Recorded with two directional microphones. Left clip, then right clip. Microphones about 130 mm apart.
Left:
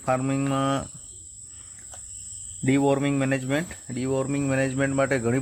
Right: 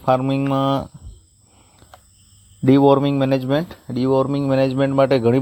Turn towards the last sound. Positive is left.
turn(degrees=-35)  # may be behind; listen again after turning